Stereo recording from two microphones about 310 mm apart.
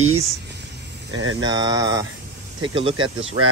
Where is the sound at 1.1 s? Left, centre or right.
Right.